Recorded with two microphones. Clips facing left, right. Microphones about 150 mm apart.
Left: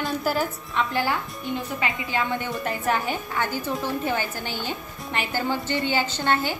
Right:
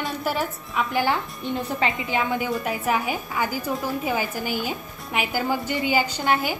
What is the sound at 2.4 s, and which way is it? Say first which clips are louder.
A woman's voice: right 3 dB; 5° right (ahead or behind).